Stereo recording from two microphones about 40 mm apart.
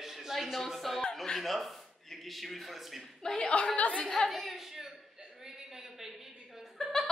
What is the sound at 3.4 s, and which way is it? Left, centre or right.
Speech, left.